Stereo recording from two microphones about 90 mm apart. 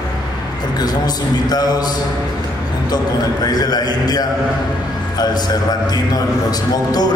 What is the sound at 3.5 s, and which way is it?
Speech, 45° left (ahead or behind).